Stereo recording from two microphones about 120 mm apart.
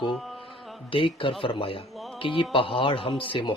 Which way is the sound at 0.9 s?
45° left (ahead or behind).